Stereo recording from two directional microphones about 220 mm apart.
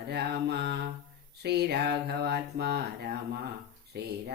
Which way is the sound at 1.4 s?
45° right (ahead or behind).